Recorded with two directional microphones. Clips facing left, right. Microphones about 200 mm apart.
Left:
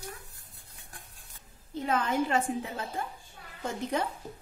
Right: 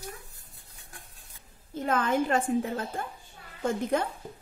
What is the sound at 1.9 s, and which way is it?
A woman's voice, 50° right (ahead or behind).